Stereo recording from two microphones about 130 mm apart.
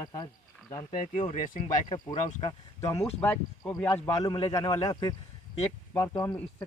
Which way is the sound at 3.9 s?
30° left (ahead or behind).